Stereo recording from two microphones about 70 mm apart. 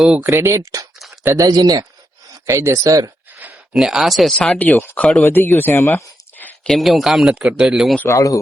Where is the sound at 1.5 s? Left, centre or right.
Right.